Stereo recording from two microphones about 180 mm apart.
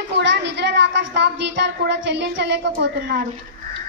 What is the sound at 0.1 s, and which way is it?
A child's voice, 80° right.